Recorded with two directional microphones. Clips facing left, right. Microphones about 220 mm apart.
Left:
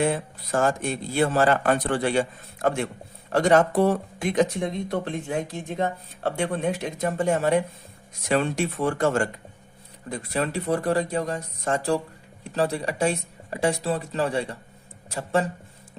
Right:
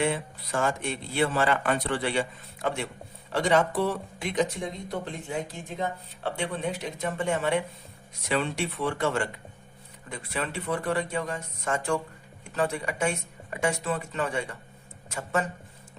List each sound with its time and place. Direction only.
0.0 s speech: 40° left (ahead or behind)
4.6 s speech: 65° left (ahead or behind); by 15.4 s 30° left (ahead or behind)